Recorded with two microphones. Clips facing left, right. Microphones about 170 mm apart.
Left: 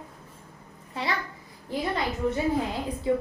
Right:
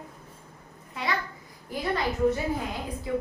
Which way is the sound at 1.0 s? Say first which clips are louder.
Left 1 dB; 30° left (ahead or behind).